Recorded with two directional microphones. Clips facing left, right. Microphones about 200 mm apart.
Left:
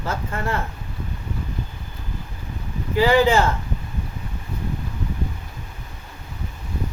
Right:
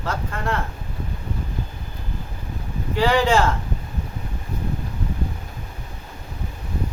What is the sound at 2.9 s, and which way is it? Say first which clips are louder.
Speech: left 2 dB; 5° left (ahead or behind).